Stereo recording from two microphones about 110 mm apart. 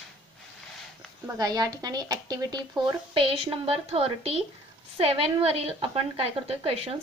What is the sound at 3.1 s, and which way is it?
A woman's voice, 55° right (ahead or behind).